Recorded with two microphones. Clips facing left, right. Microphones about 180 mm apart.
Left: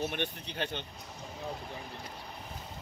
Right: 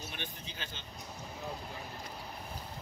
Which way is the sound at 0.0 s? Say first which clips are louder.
Left 10 dB; 65° left (ahead or behind).